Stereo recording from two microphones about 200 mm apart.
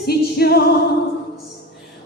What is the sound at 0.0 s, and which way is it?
Music, 50° left (ahead or behind).